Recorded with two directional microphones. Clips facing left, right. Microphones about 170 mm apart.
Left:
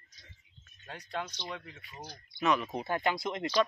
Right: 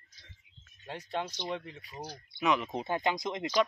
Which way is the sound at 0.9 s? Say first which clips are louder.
Right 3 dB; 25° right (ahead or behind).